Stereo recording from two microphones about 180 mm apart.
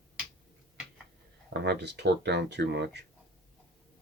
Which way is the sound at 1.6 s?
70° right (ahead or behind).